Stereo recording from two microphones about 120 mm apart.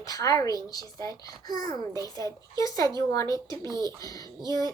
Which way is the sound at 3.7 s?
35° right (ahead or behind).